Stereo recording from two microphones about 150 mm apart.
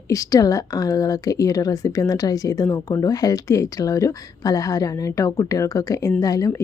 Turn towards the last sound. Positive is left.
turn(degrees=20)  # may be behind; listen again after turning